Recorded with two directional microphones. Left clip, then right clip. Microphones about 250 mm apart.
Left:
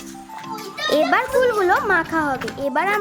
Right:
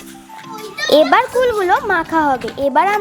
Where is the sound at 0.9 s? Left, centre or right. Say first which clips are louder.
Right 6 dB; centre.